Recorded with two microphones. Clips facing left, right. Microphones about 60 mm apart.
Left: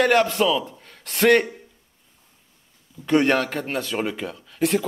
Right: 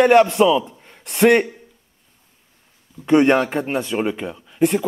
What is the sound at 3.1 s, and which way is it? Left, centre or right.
Speech, centre.